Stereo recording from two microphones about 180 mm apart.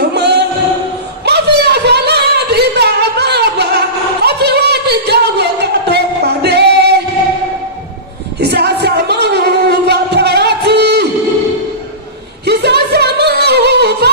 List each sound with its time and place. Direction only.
0.1 s singing: 65° right (ahead or behind)
8.4 s a sound: 65° right (ahead or behind)
12.4 s music: 65° right (ahead or behind)